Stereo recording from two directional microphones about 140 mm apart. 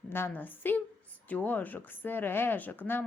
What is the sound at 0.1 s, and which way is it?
A woman's voice, 15° left (ahead or behind).